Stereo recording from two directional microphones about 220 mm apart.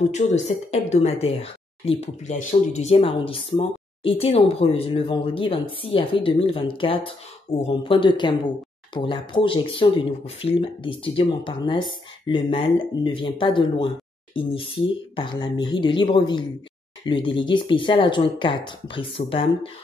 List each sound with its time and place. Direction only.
0.1 s speech: 30° left (ahead or behind)